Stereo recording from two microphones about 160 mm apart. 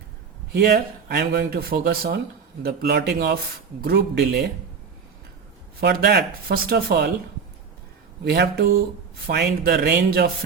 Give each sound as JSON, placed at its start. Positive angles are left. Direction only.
{"t": 0.5, "sound": "speech", "side_deg": -90}
{"t": 2.6, "sound": "speech", "side_deg": -85}
{"t": 5.8, "sound": "speech", "side_deg": -90}
{"t": 8.2, "sound": "speech", "side_deg": -90}